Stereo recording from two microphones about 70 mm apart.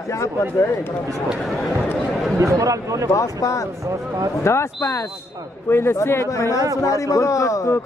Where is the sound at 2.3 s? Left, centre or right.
Right.